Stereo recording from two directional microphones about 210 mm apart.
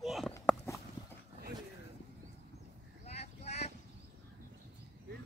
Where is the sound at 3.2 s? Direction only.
30° left (ahead or behind).